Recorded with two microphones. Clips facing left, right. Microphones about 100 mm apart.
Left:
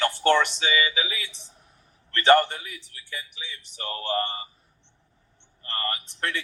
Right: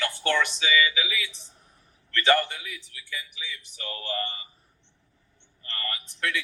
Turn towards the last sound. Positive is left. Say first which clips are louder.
# left 1 dB
turn(degrees=35)  # may be behind; listen again after turning